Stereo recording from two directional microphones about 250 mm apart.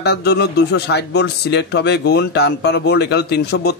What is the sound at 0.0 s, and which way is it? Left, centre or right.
Speech, left.